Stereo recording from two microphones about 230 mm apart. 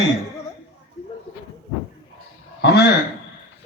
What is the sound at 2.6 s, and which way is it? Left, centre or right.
Speech, left.